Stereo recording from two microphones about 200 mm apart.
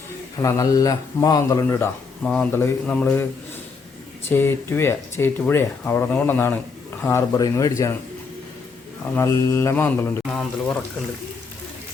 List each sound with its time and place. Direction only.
0.3 s speech: 15° left (ahead or behind)
2.2 s speech: 5° left (ahead or behind)
4.3 s speech: 10° left (ahead or behind)
9.1 s speech: 15° left (ahead or behind)